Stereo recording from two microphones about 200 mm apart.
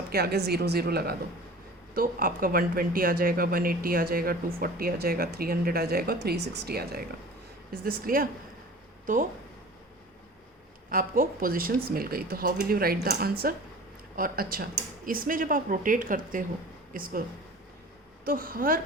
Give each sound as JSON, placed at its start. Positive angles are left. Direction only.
{"t": 0.1, "sound": "speech", "side_deg": -50}
{"t": 10.8, "sound": "speech", "side_deg": -45}
{"t": 18.3, "sound": "speech", "side_deg": -45}